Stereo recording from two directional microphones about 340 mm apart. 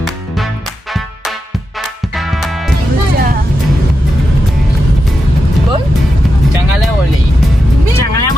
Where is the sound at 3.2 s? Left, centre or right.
Right.